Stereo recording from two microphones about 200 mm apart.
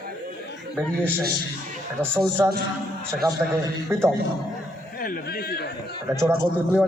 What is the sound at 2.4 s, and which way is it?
Speech, 10° right (ahead or behind).